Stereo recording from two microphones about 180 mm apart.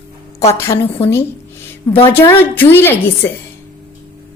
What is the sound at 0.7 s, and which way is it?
Speech, 30° left (ahead or behind).